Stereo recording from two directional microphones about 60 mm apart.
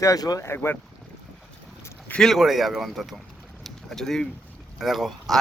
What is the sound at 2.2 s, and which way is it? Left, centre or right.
Speech, centre.